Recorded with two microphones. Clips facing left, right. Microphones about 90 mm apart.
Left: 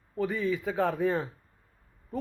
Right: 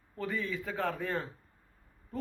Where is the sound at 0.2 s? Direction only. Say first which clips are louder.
Left 6 dB; 15° left (ahead or behind).